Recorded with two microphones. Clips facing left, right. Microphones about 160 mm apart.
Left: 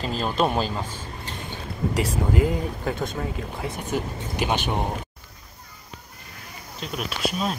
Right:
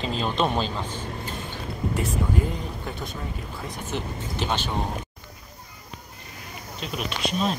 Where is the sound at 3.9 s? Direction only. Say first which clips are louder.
Left 2 dB; 10° left (ahead or behind).